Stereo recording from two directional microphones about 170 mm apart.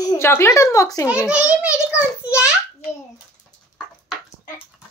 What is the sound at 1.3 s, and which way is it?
A child's voice, 5° right (ahead or behind).